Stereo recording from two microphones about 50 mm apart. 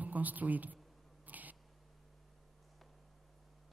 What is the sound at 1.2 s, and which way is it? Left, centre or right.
Cat, right.